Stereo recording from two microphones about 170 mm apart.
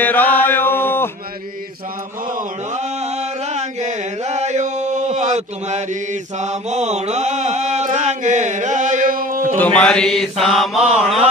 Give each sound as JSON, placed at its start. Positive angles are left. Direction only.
{"t": 0.0, "sound": "chant", "side_deg": 10}
{"t": 2.7, "sound": "a sound", "side_deg": -40}
{"t": 6.4, "sound": "mantra", "side_deg": -40}
{"t": 9.6, "sound": "mantra", "side_deg": 5}